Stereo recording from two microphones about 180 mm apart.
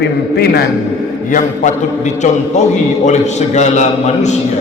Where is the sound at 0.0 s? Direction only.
65° left (ahead or behind).